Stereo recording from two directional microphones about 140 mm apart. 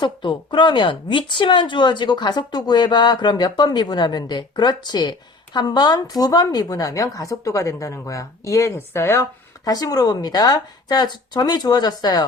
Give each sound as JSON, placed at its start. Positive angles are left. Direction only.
{"t": 0.0, "sound": "a woman's voice", "side_deg": 35}